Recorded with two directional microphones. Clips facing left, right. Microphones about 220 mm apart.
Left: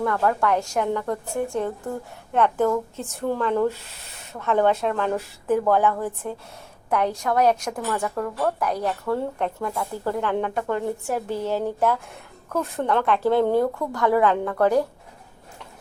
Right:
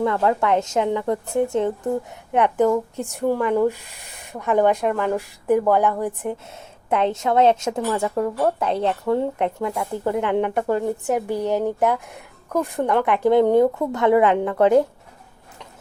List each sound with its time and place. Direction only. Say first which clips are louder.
0.0 s a woman's voice: right 2 dB; 20° right (ahead or behind)